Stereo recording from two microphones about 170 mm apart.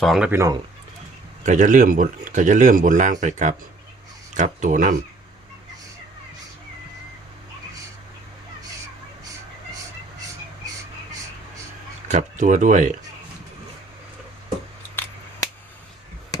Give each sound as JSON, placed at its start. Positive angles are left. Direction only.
{"t": 0.0, "sound": "speech", "side_deg": 0}
{"t": 0.3, "sound": "speech", "side_deg": -15}
{"t": 1.5, "sound": "a man's voice", "side_deg": -50}
{"t": 12.0, "sound": "a man's voice", "side_deg": -45}